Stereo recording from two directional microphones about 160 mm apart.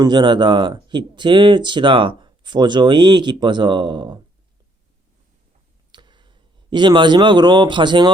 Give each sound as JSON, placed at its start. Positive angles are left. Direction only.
{"t": 0.0, "sound": "speech", "side_deg": -30}
{"t": 5.9, "sound": "speech", "side_deg": -30}